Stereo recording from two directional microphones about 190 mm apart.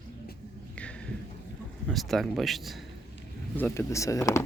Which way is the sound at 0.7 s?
5° left (ahead or behind).